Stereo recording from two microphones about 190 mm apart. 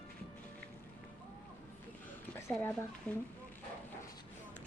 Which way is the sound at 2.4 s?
5° left (ahead or behind).